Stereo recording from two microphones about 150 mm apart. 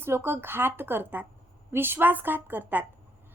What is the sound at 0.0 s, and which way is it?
A woman's voice, 15° right (ahead or behind).